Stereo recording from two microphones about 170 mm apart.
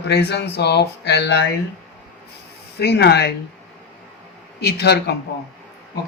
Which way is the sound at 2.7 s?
75° left (ahead or behind).